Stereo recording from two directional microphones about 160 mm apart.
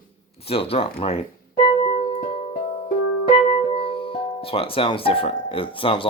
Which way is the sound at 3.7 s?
35° left (ahead or behind).